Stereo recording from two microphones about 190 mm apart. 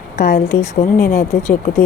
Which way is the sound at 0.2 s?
55° left (ahead or behind).